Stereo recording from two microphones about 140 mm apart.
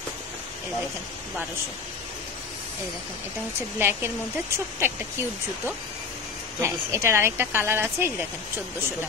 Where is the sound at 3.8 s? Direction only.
15° right (ahead or behind).